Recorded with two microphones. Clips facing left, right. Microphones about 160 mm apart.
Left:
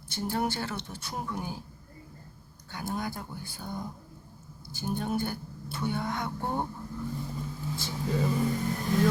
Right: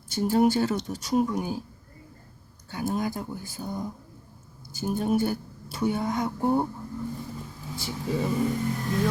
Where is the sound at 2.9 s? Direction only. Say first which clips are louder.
Right 4 dB; 15° right (ahead or behind).